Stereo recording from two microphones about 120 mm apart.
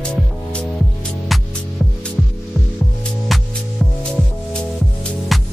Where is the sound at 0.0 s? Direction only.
10° left (ahead or behind).